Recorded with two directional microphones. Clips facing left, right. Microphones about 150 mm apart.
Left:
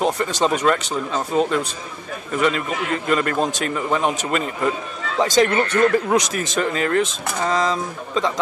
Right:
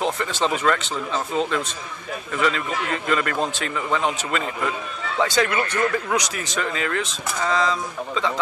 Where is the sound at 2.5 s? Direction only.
30° left (ahead or behind).